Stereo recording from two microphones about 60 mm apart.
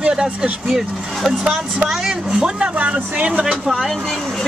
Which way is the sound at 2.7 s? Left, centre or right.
Right.